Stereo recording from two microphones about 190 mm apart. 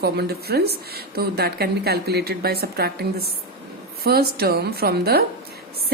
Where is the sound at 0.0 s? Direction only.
55° right (ahead or behind).